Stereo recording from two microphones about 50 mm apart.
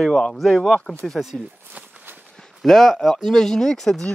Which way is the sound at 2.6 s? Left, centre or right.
Centre.